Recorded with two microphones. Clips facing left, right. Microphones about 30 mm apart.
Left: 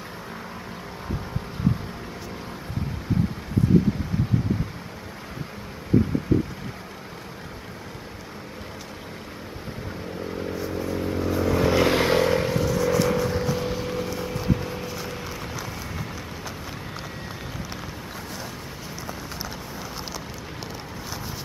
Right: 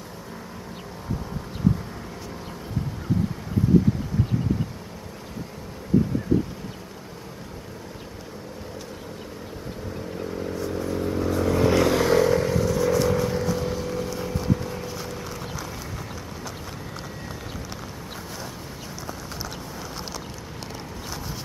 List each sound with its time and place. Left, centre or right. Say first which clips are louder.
10.2 s vehicle: even; centre
11.8 s vehicle: right 1 dB; left
12.6 s vehicle: even; centre